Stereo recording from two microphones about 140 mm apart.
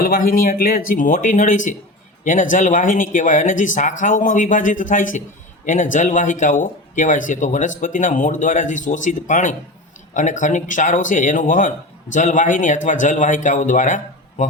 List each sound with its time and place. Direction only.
0.0 s speech: 90° left; by 14.4 s 60° left (ahead or behind)